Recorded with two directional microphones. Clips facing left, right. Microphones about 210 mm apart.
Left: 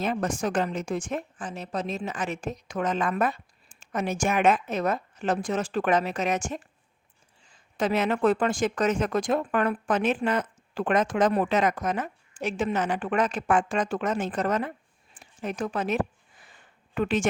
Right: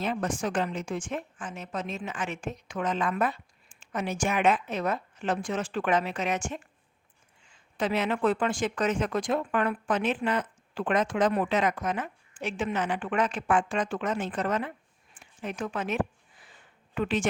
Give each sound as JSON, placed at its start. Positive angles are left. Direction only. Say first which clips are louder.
{"t": 0.0, "sound": "a woman's voice", "louder": "left 2 dB", "side_deg": 45}
{"t": 15.2, "sound": "a sound", "louder": "left 3 dB", "side_deg": 40}
{"t": 16.9, "sound": "speech", "louder": "left 3 dB", "side_deg": 45}